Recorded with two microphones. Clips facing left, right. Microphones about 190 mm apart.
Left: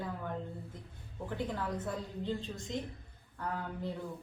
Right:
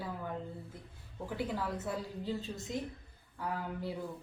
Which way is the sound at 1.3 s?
10° right (ahead or behind).